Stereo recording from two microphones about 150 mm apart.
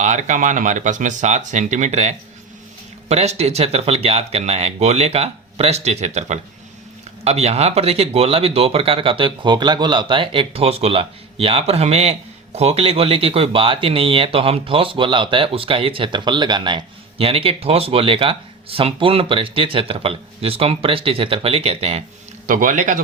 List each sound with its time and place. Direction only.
0.0 s speech: 55° right (ahead or behind)
22.4 s speech: 60° right (ahead or behind)